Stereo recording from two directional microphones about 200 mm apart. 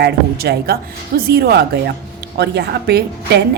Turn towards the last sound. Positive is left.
turn(degrees=-55)  # may be behind; listen again after turning